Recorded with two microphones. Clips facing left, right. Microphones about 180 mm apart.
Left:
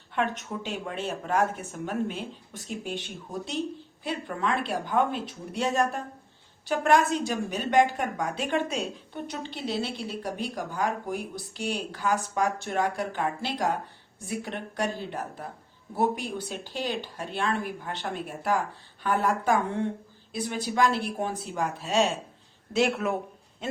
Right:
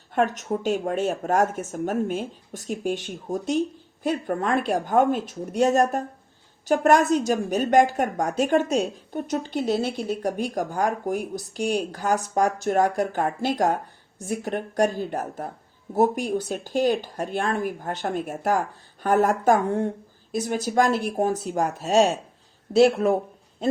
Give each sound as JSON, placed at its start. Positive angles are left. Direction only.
{"t": 0.1, "sound": "a woman's voice", "side_deg": -45}